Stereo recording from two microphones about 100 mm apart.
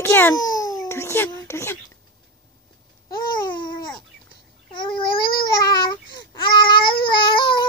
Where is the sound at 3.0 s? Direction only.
40° left (ahead or behind).